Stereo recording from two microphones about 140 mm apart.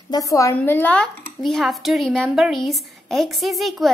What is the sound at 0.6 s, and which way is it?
Speech, 10° left (ahead or behind).